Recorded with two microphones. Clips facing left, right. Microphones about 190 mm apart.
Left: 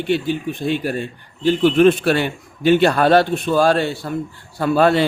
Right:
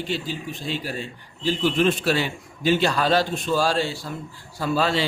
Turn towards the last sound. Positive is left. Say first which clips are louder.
# left 8 dB
turn(degrees=55)  # may be behind; listen again after turning